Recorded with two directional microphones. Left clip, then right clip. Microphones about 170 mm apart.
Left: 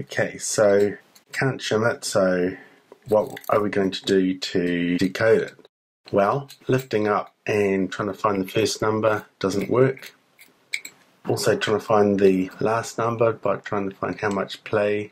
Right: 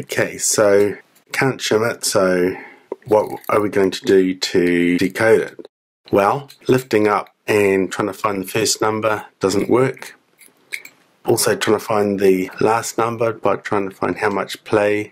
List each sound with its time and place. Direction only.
0.1 s speech: 35° right (ahead or behind)
11.4 s speech: 35° right (ahead or behind)